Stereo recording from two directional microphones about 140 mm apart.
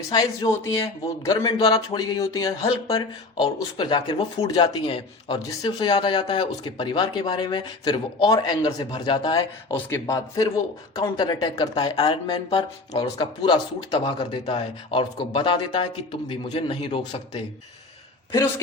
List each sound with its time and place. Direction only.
0.1 s a man's voice: 25° left (ahead or behind)
9.7 s a man's voice: 20° left (ahead or behind)
12.5 s a man's voice: 45° left (ahead or behind)
18.3 s speech: 20° left (ahead or behind)